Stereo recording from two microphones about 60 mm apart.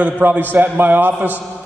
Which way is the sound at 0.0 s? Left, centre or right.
Right.